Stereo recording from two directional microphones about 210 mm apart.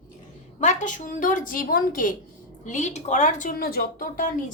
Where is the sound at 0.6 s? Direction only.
35° left (ahead or behind).